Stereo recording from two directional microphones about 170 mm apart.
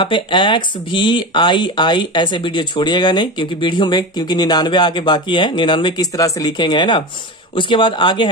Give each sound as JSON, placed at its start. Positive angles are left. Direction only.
{"t": 0.0, "sound": "speech", "side_deg": 30}